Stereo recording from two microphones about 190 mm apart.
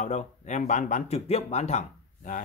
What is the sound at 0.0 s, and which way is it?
Speech, 40° left (ahead or behind).